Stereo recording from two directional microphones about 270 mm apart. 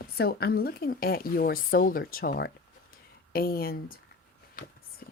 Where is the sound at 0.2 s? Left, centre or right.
Left.